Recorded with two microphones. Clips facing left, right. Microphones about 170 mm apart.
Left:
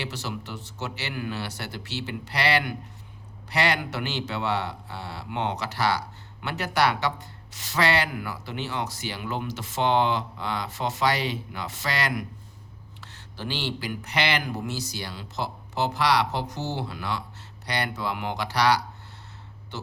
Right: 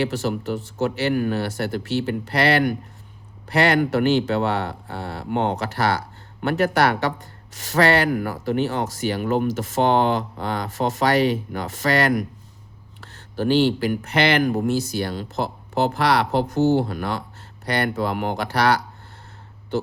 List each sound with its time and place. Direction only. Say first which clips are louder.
0.0 s a man's voice: right 10 dB; 50° right (ahead or behind)